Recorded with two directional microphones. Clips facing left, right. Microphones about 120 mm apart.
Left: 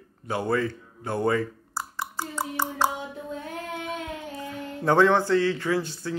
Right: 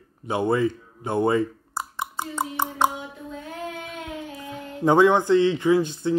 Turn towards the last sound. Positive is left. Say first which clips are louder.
# right 7 dB
turn(degrees=-20)  # may be behind; listen again after turning